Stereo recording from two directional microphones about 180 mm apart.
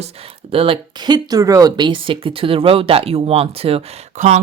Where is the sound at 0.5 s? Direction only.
30° right (ahead or behind).